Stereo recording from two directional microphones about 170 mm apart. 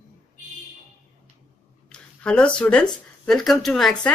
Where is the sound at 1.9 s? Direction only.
5° left (ahead or behind).